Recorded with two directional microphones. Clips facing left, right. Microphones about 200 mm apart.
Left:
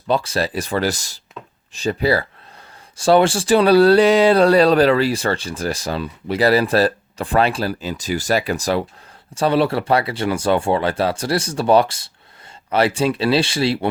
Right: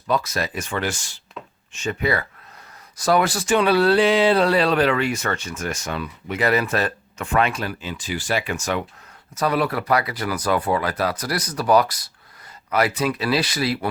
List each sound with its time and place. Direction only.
0.1 s speech: 30° left (ahead or behind)